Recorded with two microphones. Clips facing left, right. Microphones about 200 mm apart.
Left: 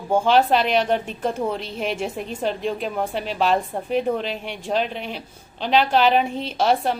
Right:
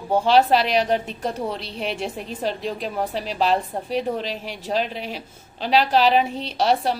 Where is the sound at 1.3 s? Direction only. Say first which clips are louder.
Left 4 dB; 35° right (ahead or behind).